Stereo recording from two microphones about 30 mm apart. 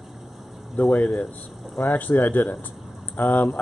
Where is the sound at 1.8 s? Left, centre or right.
Left.